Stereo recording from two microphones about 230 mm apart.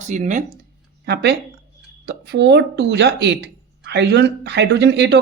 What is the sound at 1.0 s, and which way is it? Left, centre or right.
Speech, right.